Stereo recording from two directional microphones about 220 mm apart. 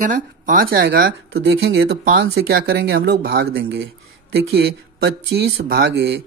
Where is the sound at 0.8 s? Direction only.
40° right (ahead or behind).